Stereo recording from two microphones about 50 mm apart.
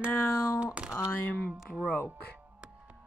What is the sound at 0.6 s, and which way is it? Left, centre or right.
Speech, centre.